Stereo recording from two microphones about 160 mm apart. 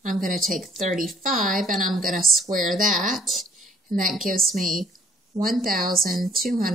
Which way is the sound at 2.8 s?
55° right (ahead or behind).